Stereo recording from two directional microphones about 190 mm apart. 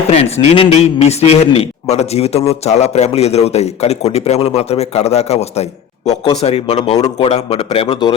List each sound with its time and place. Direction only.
0.1 s a man's voice: 35° left (ahead or behind)